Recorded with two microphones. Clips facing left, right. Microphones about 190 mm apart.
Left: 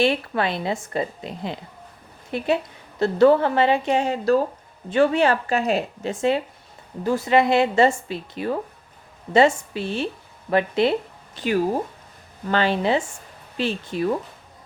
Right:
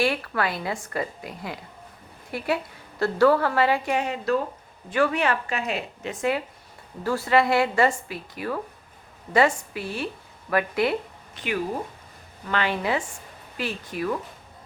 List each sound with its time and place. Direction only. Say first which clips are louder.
0.0 s a woman's voice: left 4 dB; 25° left (ahead or behind)
11.3 s a woman's voice: left 6 dB; 35° left (ahead or behind)